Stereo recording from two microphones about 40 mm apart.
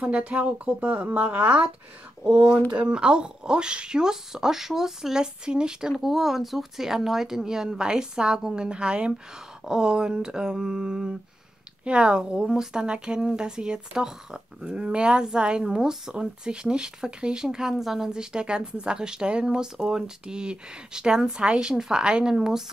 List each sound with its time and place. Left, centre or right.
0.0 s speech: right; by 22.6 s centre